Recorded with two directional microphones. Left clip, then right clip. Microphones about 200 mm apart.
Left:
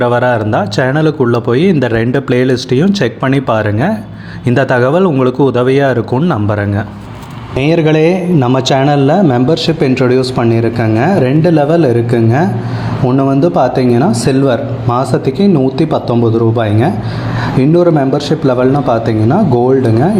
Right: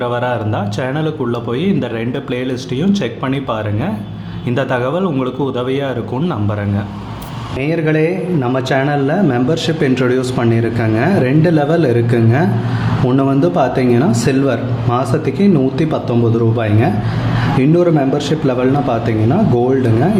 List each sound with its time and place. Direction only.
0.0 s speech: 30° left (ahead or behind)
7.6 s a man's voice: 35° left (ahead or behind); by 20.1 s 15° left (ahead or behind)